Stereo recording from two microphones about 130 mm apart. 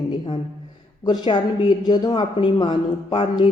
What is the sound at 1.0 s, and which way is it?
A woman's voice, 35° left (ahead or behind).